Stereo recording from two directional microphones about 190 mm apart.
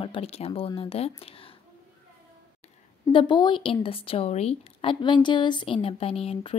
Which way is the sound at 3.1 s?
25° left (ahead or behind).